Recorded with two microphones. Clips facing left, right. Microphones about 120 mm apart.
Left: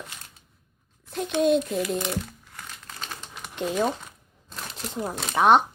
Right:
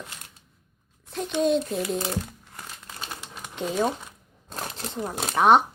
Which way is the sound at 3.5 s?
Centre (ahead or behind).